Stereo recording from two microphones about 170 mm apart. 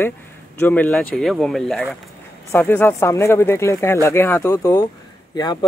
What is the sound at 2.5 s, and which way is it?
Speech, 10° left (ahead or behind).